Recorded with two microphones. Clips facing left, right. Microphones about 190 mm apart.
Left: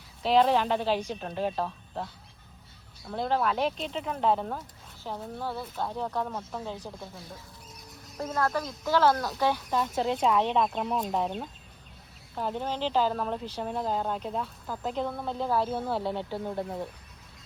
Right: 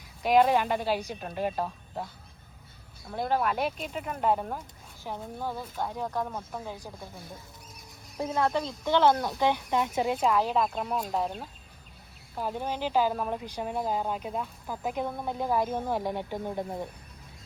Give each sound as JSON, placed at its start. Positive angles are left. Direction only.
{"t": 0.2, "sound": "speech", "side_deg": -10}
{"t": 3.2, "sound": "speech", "side_deg": -10}
{"t": 8.3, "sound": "speech", "side_deg": -20}